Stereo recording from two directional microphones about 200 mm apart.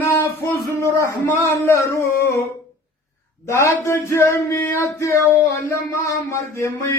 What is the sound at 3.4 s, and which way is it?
Speech, 10° left (ahead or behind).